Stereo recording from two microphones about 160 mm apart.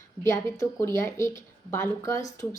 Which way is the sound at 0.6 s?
20° left (ahead or behind).